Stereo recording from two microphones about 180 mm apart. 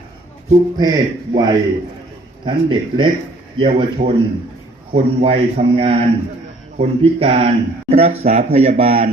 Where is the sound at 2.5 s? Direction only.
25° right (ahead or behind).